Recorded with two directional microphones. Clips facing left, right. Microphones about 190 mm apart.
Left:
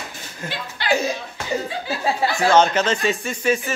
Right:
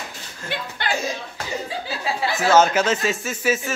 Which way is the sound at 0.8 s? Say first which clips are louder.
Left 6 dB; 50° right (ahead or behind).